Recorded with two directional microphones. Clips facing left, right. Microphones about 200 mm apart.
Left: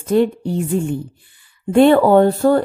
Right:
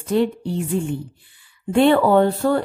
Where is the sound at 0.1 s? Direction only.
45° left (ahead or behind).